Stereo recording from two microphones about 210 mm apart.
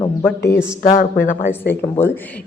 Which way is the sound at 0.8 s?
40° left (ahead or behind).